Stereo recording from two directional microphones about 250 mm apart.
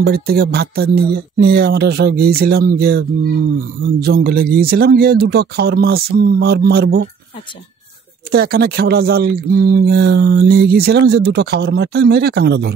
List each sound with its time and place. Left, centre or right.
0.0 s speech: right
8.3 s speech: right